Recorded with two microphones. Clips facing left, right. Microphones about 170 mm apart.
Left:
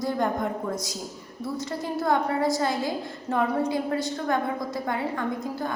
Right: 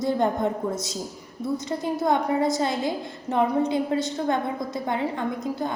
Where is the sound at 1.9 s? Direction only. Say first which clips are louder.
Right 1 dB; 20° right (ahead or behind).